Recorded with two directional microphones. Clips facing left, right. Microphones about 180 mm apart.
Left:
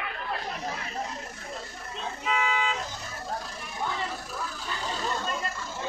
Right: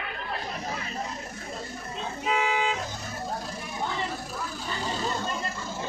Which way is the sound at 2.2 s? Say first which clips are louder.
Right 2 dB; 40° right (ahead or behind).